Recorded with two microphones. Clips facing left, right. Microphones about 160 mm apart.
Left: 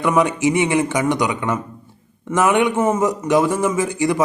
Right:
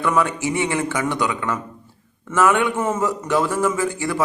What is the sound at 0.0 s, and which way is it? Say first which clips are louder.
A man's voice: left 4 dB; 15° left (ahead or behind).